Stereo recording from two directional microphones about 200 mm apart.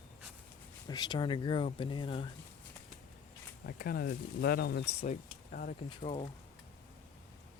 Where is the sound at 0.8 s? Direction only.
20° left (ahead or behind).